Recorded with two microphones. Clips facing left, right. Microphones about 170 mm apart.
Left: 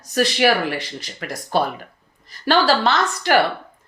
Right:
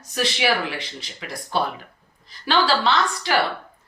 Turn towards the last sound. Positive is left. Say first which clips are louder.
# left 2 dB
turn(degrees=50)  # may be behind; listen again after turning